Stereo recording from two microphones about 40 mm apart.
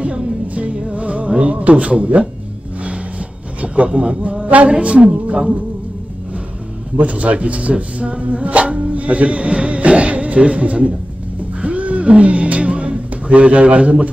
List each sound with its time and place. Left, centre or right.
0.0 s music: right
1.6 s a man's voice: right
3.6 s a man's voice: right
4.6 s a man's voice: right
7.0 s a man's voice: right
11.6 s music: right